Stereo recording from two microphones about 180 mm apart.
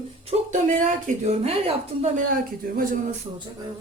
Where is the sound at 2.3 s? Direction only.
50° right (ahead or behind).